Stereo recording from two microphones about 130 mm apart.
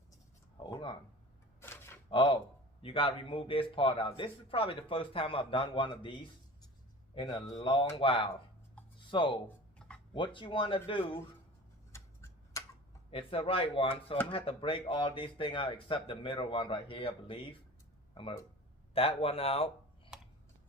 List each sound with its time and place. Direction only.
0.6 s a sound: 35° left (ahead or behind)
1.6 s gasp: 20° left (ahead or behind)
2.0 s a sound: 40° left (ahead or behind)
2.8 s a man's voice: 45° left (ahead or behind)
11.9 s tick-tock: 25° left (ahead or behind)
13.1 s a man's voice: 45° left (ahead or behind)
20.1 s computer keyboard: 5° right (ahead or behind)